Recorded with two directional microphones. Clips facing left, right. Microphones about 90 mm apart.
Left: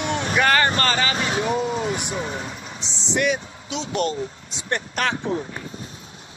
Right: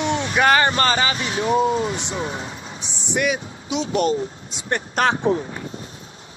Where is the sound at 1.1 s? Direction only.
35° left (ahead or behind).